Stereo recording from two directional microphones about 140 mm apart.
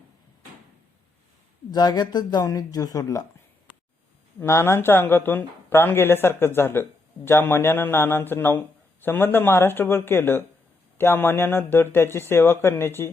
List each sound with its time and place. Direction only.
1.7 s speech: 30° left (ahead or behind)
4.4 s a man's voice: 20° left (ahead or behind)